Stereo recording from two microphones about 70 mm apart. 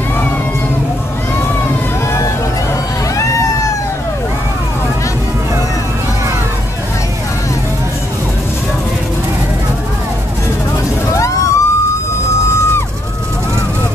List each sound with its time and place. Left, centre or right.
11.1 s vehicle: left